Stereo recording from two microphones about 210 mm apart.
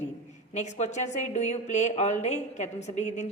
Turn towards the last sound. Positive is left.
turn(degrees=35)  # may be behind; listen again after turning